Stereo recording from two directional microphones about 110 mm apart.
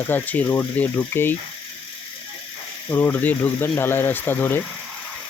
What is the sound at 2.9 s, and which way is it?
Speech, 20° left (ahead or behind).